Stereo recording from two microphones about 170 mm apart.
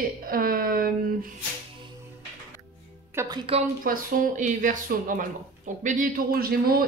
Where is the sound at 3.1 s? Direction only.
15° right (ahead or behind).